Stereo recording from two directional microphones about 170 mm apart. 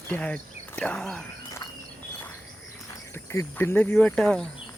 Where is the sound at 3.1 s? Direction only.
15° left (ahead or behind).